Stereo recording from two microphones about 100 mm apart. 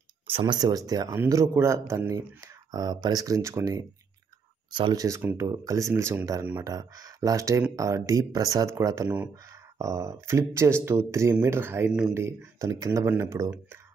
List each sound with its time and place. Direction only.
0.3 s speech: 50° right (ahead or behind); by 3.8 s 30° right (ahead or behind)
4.6 s speech: 50° right (ahead or behind)
4.9 s speech: 35° right (ahead or behind)